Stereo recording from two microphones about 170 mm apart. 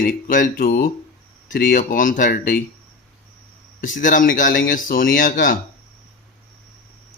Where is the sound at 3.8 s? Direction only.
50° left (ahead or behind).